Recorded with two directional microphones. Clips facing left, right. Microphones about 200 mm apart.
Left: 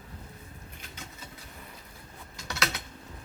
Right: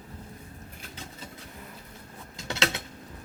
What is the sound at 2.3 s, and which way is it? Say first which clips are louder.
Mechanisms: right 4 dB; 25° right (ahead or behind).